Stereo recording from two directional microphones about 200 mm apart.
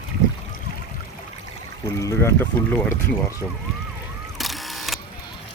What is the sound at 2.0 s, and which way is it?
Speech, 15° left (ahead or behind).